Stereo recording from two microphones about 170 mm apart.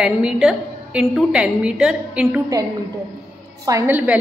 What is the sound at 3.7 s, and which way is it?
Speech, 10° right (ahead or behind).